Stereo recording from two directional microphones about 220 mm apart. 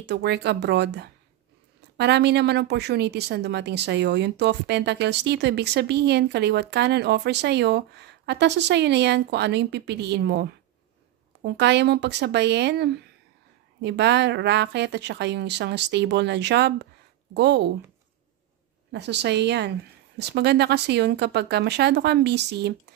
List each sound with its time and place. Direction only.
0.0 s a woman's voice: 50° right (ahead or behind)
18.9 s a woman's voice: 50° right (ahead or behind)